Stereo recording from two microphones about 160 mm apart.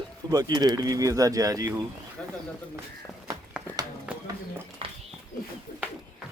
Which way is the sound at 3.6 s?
5° right (ahead or behind).